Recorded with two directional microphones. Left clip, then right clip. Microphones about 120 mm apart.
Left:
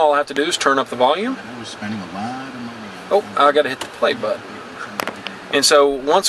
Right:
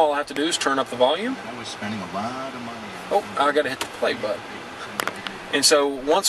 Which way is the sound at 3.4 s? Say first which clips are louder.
Left 8 dB; 25° left (ahead or behind).